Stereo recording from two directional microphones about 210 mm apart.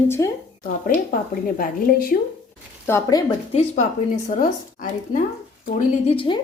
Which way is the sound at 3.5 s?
30° left (ahead or behind).